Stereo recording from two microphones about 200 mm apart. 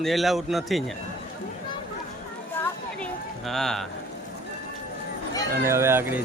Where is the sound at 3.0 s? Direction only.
Centre (ahead or behind).